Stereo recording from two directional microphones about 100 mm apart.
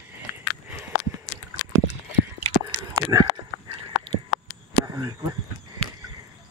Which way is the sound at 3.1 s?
30° right (ahead or behind).